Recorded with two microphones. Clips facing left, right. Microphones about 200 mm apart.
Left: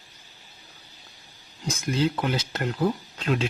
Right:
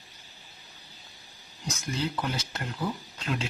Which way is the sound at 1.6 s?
90° left.